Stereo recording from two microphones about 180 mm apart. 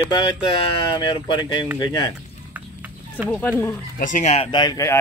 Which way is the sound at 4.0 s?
45° left (ahead or behind).